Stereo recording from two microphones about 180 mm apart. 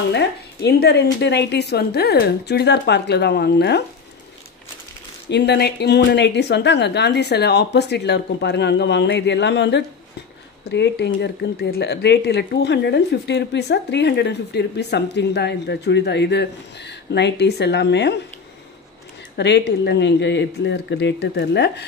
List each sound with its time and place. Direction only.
0.1 s speech: 65° left (ahead or behind)
5.3 s speech: 70° left (ahead or behind)
19.3 s speech: 70° left (ahead or behind)